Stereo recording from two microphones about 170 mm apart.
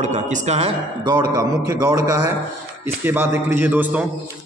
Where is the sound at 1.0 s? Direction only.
25° right (ahead or behind).